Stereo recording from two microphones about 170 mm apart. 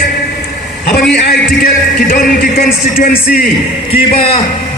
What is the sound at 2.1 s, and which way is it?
Speech, 55° left (ahead or behind).